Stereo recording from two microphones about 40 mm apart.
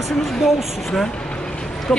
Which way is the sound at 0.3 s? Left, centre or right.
Centre.